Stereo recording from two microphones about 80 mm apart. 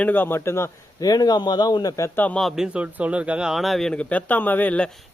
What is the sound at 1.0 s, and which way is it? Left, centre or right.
Speech, left.